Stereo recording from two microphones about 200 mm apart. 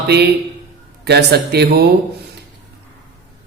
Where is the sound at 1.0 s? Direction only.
55° right (ahead or behind).